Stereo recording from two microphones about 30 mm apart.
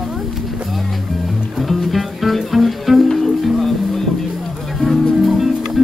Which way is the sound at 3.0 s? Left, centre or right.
Centre.